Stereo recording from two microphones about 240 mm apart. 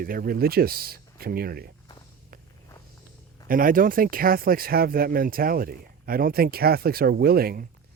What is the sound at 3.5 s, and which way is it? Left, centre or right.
Speech, right.